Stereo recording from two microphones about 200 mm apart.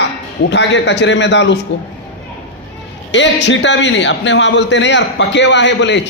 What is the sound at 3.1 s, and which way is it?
A man's voice, 60° left (ahead or behind).